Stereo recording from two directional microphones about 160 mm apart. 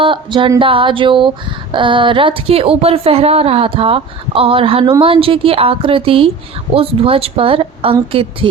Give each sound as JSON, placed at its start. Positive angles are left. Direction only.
{"t": 0.0, "sound": "speech", "side_deg": -30}